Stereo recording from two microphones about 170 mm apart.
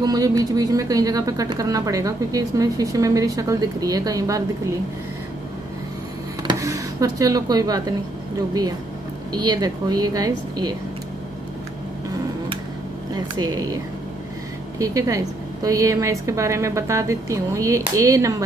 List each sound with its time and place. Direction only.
0.0 s a woman's voice: 20° right (ahead or behind)
6.6 s speech: 20° right (ahead or behind)
9.3 s a woman's voice: 25° right (ahead or behind)
13.1 s a woman's voice: 20° right (ahead or behind)
14.8 s a woman's voice: 20° right (ahead or behind)